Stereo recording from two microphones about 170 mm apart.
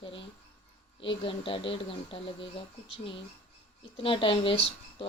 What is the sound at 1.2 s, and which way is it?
Speech, 30° left (ahead or behind).